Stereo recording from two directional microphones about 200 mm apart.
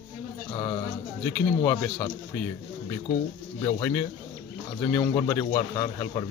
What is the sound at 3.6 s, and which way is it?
A man's voice, 15° left (ahead or behind).